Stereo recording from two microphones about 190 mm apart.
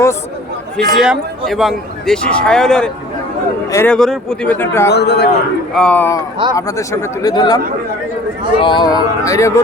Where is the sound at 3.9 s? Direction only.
Centre (ahead or behind).